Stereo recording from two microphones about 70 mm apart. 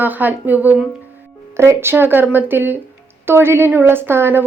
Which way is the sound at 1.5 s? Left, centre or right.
Right.